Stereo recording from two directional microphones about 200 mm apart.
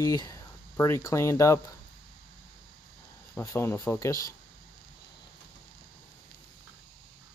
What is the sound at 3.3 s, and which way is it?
Speech, 10° left (ahead or behind).